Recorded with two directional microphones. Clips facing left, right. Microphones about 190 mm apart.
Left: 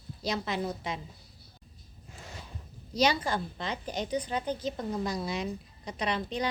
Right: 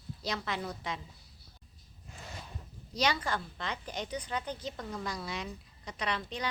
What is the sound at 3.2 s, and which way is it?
Speech, 15° left (ahead or behind).